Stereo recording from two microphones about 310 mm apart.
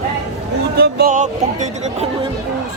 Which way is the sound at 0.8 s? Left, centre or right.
Right.